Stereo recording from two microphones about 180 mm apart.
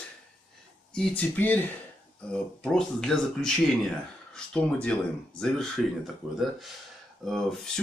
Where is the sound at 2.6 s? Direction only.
5° left (ahead or behind).